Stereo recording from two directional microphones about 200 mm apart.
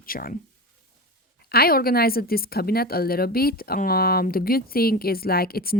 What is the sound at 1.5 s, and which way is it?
Speech, 50° left (ahead or behind).